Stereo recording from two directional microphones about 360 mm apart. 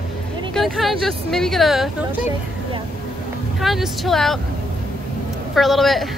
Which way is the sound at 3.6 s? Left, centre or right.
Centre.